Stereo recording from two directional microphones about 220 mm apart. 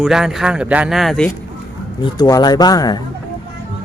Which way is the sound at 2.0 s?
20° left (ahead or behind).